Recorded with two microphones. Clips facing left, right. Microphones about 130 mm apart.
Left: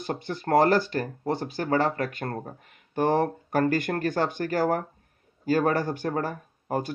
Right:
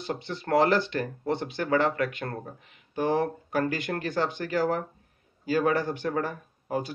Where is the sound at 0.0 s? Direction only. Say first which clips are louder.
Left 2 dB; 45° left (ahead or behind).